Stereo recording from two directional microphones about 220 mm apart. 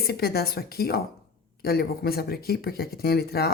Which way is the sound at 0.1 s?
45° left (ahead or behind).